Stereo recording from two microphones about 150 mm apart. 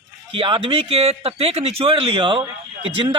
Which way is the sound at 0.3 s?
35° right (ahead or behind).